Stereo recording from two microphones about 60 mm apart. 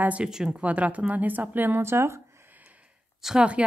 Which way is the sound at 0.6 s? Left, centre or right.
Right.